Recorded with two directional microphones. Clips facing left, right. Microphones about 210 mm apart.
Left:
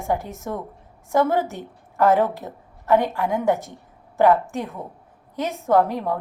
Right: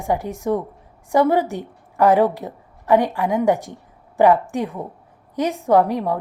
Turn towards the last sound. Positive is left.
turn(degrees=-15)  # may be behind; listen again after turning